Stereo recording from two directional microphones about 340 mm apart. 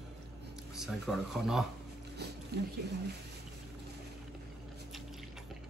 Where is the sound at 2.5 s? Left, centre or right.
Right.